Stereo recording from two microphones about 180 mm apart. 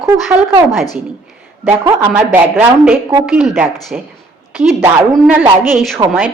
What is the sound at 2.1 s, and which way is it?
A woman's voice, 10° right (ahead or behind).